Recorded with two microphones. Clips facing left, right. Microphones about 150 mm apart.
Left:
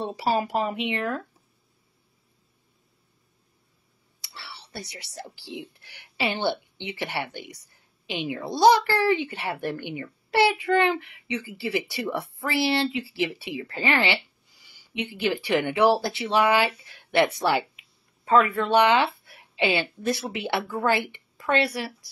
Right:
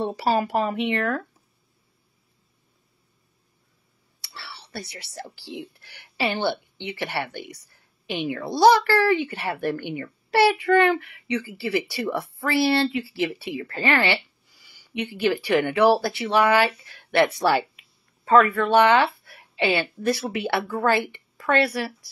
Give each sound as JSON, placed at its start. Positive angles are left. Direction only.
{"t": 0.3, "sound": "a child's voice", "side_deg": 15}
{"t": 4.2, "sound": "a child's voice", "side_deg": 15}